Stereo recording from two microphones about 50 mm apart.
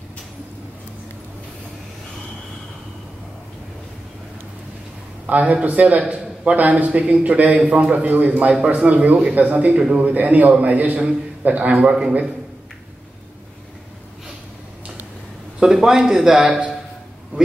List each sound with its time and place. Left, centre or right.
5.2 s a man's voice: right
15.6 s a man's voice: centre